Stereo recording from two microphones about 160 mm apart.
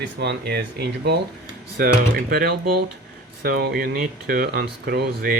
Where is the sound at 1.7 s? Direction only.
65° right (ahead or behind).